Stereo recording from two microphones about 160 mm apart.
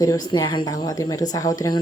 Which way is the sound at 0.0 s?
25° left (ahead or behind).